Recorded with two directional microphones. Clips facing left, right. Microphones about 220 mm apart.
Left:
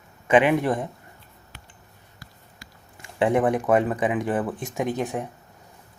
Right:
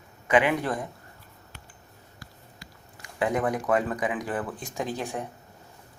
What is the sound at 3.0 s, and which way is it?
Speech, 25° left (ahead or behind).